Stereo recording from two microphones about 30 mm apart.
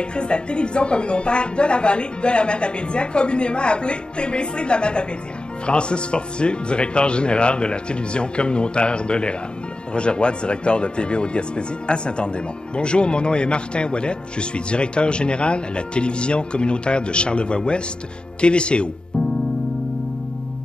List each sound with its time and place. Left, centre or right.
0.0 s speech: left